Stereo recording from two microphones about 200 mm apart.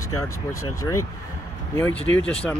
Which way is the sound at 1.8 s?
10° left (ahead or behind).